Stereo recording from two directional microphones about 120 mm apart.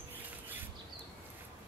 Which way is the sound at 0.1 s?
15° right (ahead or behind).